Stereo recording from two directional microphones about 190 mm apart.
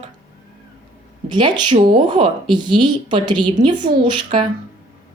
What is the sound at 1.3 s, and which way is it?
Speech, 25° right (ahead or behind).